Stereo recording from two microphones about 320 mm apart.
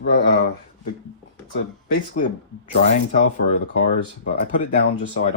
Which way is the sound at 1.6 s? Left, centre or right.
Left.